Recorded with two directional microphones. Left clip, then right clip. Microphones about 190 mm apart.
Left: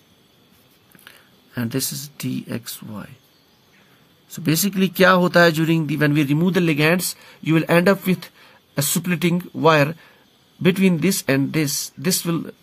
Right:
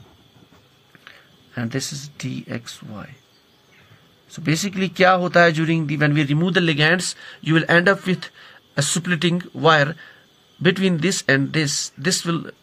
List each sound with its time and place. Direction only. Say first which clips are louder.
1.0 s speech: right 1 dB; 45° left (ahead or behind)
4.3 s speech: left 1 dB; 45° left (ahead or behind); by 12.5 s 25° left (ahead or behind)